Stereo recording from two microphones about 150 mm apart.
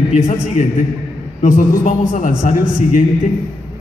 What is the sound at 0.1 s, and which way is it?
A man's voice, 55° left (ahead or behind).